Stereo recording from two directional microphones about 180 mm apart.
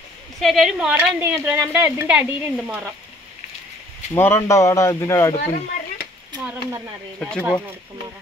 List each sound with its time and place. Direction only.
0.4 s a woman's voice: centre (ahead or behind)
4.1 s speech: 15° left (ahead or behind)
6.4 s a woman's voice: 10° right (ahead or behind)
7.2 s speech: 5° left (ahead or behind)